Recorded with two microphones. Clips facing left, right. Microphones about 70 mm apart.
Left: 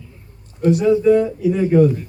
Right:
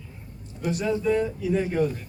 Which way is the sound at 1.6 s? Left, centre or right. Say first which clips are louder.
Left 11 dB; left.